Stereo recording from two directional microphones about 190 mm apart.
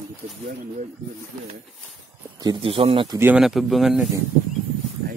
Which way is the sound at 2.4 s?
30° right (ahead or behind).